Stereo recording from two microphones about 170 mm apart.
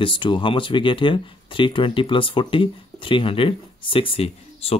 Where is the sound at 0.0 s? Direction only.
30° left (ahead or behind).